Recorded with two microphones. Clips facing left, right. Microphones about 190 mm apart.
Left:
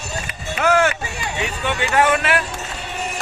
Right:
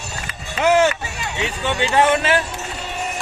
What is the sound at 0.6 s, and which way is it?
Speech, 20° right (ahead or behind).